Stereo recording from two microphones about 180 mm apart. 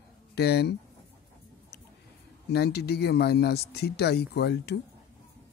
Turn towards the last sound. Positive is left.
turn(degrees=65)  # may be behind; listen again after turning